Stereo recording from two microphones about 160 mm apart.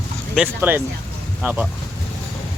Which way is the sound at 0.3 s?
10° right (ahead or behind).